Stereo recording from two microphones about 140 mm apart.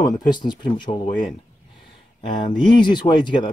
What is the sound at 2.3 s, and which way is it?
Speech, 35° left (ahead or behind).